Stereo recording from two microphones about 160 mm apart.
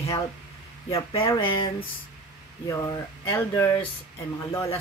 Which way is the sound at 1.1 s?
30° left (ahead or behind).